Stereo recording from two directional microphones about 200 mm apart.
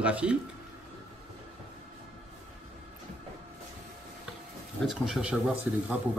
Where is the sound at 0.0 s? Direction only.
5° right (ahead or behind).